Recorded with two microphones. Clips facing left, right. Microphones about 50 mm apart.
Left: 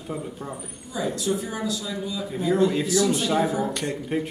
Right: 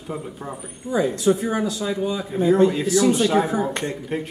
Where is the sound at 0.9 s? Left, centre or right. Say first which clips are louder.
Right 7 dB; right.